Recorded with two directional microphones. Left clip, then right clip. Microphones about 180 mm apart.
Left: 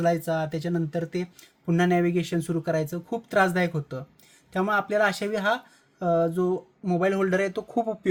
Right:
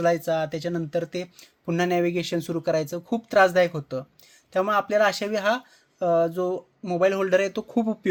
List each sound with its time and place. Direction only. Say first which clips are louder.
0.0 s speech: right 2 dB; 20° right (ahead or behind)